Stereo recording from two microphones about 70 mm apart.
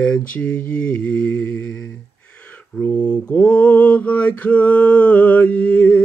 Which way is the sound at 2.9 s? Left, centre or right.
Centre.